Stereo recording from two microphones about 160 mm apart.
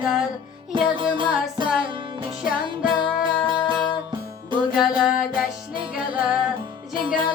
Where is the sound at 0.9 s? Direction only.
30° right (ahead or behind).